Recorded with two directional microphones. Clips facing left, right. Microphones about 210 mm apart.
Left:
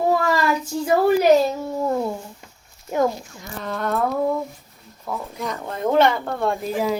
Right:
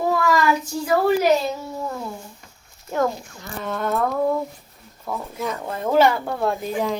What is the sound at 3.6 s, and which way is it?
Speech, centre (ahead or behind).